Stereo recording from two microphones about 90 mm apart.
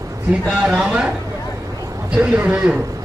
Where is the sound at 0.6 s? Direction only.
10° right (ahead or behind).